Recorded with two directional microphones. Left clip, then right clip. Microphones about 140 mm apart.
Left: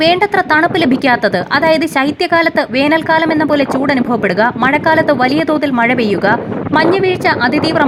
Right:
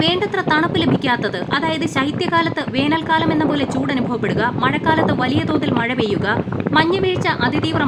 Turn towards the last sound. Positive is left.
turn(degrees=35)  # may be behind; listen again after turning